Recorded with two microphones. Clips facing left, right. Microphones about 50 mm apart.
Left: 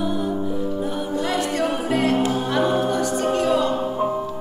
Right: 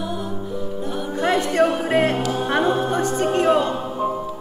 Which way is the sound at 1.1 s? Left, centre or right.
Right.